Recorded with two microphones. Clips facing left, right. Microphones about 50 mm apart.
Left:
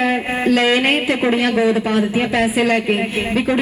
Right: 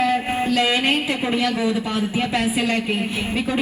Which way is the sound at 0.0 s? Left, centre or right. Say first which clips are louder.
Left 2 dB; left.